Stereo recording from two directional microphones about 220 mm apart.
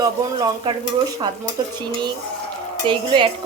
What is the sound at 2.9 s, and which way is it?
Speech, 20° right (ahead or behind).